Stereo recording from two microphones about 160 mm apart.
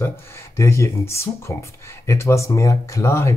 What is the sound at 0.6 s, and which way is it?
Speech, 15° left (ahead or behind).